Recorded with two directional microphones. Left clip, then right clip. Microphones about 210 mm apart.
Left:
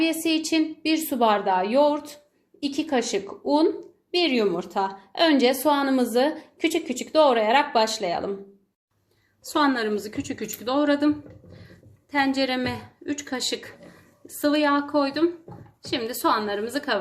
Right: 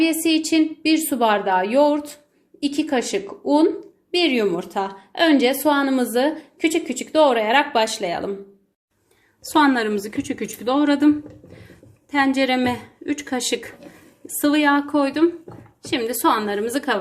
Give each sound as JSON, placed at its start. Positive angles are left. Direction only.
{"t": 0.0, "sound": "a woman's voice", "side_deg": -10}
{"t": 9.5, "sound": "a woman's voice", "side_deg": -20}
{"t": 12.1, "sound": "a woman's voice", "side_deg": -15}